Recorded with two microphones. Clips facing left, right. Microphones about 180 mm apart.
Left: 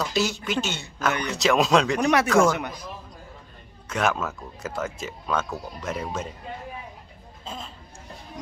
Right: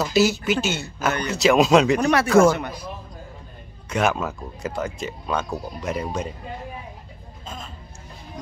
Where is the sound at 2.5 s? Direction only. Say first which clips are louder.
Right 3 dB; 15° left (ahead or behind).